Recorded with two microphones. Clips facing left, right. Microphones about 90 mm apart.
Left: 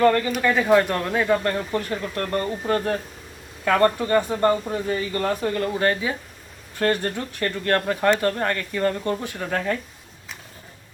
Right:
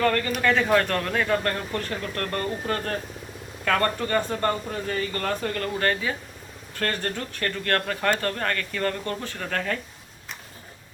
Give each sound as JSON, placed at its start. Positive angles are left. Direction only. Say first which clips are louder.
{"t": 0.3, "sound": "speech", "louder": "left 3 dB", "side_deg": 5}